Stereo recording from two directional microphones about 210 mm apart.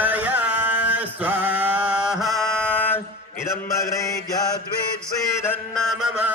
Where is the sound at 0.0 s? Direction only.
5° right (ahead or behind).